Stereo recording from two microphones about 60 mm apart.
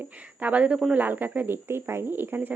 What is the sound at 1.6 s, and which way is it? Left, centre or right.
Speech, right.